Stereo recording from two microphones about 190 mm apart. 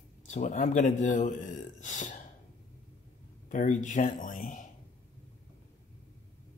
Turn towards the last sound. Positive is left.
turn(degrees=45)  # may be behind; listen again after turning